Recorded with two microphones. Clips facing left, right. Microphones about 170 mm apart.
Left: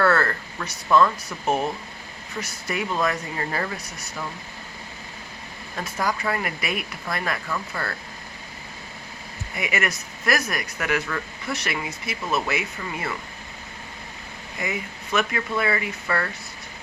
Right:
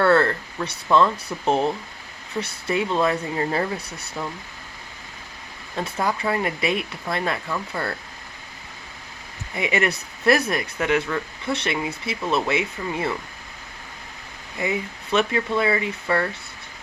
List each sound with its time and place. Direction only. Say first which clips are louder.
0.0 s speech: right 3 dB; 25° right (ahead or behind)
5.7 s speech: right 2 dB; 25° right (ahead or behind)
9.6 s speech: right 4 dB; 30° right (ahead or behind)
14.6 s speech: right 4 dB; 30° right (ahead or behind)